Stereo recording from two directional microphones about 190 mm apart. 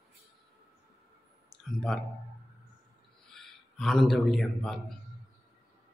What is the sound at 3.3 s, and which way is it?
A man's voice, centre (ahead or behind).